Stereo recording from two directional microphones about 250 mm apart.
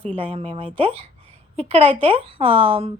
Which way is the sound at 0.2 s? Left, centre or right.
Right.